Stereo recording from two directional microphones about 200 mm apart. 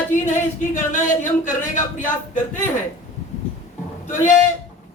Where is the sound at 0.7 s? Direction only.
40° left (ahead or behind).